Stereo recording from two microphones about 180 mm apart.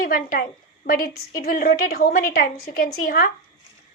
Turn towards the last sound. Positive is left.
turn(degrees=55)  # may be behind; listen again after turning